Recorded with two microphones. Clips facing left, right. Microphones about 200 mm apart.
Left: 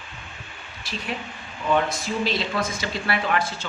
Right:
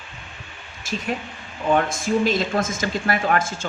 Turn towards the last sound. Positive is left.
turn(degrees=-45)  # may be behind; listen again after turning